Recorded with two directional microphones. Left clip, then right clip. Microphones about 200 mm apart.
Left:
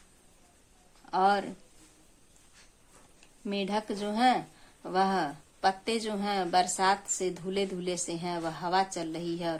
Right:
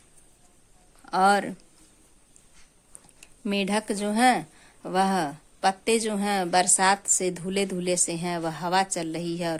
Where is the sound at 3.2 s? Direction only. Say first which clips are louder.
Right 6 dB; 40° right (ahead or behind).